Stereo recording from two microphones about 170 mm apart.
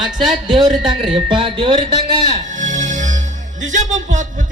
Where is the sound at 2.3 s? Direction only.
45° right (ahead or behind).